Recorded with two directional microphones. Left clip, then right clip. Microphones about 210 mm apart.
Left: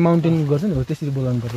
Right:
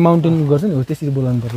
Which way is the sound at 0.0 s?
35° right (ahead or behind).